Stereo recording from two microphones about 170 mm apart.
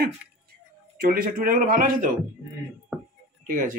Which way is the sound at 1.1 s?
55° right (ahead or behind).